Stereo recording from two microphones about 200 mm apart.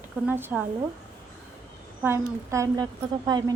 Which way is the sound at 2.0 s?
15° right (ahead or behind).